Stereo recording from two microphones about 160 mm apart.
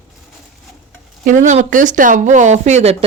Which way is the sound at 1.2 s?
55° right (ahead or behind).